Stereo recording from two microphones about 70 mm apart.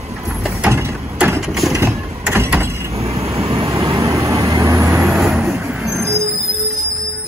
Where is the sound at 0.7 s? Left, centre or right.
Right.